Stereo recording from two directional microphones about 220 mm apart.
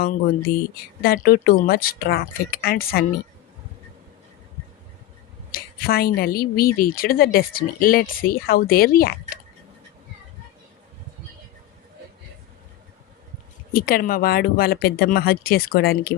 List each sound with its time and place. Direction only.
0.5 s speech: 45° left (ahead or behind)
5.5 s a sound: 40° left (ahead or behind)
6.1 s speech: 45° left (ahead or behind)
13.7 s speech: 40° left (ahead or behind)